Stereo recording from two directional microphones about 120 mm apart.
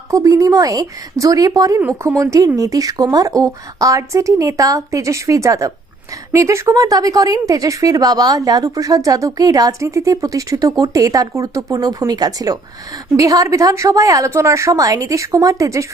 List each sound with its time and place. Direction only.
0.1 s speech: 30° right (ahead or behind)